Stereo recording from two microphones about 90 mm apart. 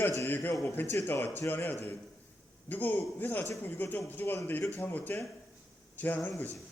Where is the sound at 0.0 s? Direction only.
35° left (ahead or behind).